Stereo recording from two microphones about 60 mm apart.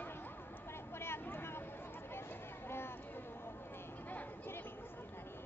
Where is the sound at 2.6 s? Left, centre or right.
Left.